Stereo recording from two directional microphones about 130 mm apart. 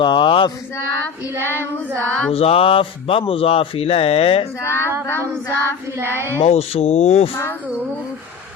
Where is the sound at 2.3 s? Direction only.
50° left (ahead or behind).